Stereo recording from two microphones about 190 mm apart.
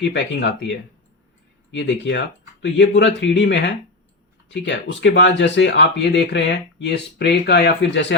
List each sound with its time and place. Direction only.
0.0 s speech: 65° left (ahead or behind)
1.7 s speech: 70° left (ahead or behind)